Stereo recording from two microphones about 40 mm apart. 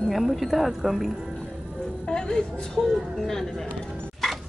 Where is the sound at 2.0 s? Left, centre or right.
Centre.